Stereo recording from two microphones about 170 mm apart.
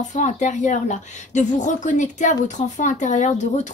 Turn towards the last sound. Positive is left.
turn(degrees=45)  # may be behind; listen again after turning